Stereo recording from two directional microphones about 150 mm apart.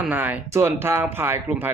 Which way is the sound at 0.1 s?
10° right (ahead or behind).